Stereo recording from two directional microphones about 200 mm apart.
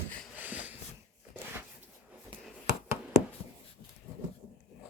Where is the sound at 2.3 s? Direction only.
15° right (ahead or behind).